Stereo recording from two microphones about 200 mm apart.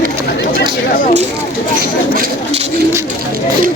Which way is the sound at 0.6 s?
45° left (ahead or behind).